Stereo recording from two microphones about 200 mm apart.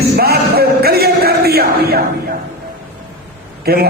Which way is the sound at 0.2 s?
50° right (ahead or behind).